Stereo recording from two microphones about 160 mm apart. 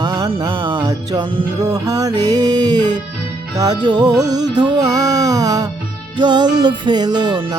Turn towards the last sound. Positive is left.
turn(degrees=-25)  # may be behind; listen again after turning